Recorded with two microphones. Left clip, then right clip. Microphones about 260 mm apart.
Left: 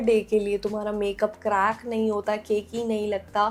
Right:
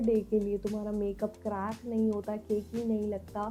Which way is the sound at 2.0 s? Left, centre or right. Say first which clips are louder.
Left 5 dB; left.